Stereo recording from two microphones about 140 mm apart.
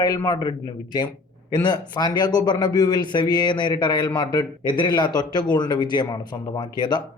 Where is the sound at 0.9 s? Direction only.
30° left (ahead or behind).